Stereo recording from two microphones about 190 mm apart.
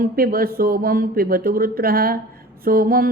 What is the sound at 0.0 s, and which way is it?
A woman's voice, 50° right (ahead or behind).